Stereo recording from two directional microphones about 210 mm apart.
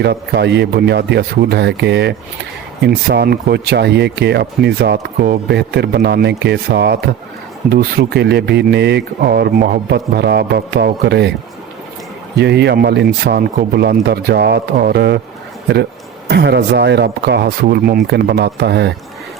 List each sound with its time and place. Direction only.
0.0 s speech: 55° right (ahead or behind)
12.4 s speech: 55° right (ahead or behind)
16.3 s speech: 55° right (ahead or behind)